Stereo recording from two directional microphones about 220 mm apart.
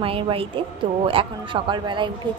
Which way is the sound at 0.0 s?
25° right (ahead or behind).